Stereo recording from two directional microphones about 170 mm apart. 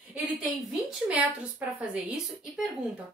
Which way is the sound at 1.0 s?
5° right (ahead or behind).